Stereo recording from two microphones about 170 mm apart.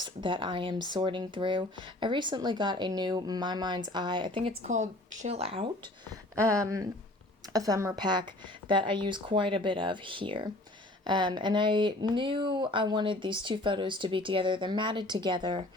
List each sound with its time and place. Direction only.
0.0 s speech: 30° right (ahead or behind)
4.7 s speech: 45° right (ahead or behind)
6.4 s speech: 20° right (ahead or behind)